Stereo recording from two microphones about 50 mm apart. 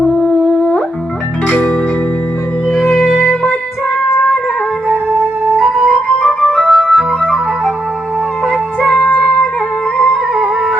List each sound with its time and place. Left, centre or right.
0.1 s music: left
5.5 s music: centre
6.2 s music: centre
8.4 s music: centre
9.0 s music: left
10.0 s music: centre